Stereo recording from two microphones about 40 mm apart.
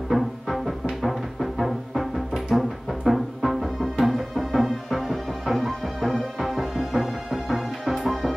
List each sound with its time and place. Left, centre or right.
0.1 s music: centre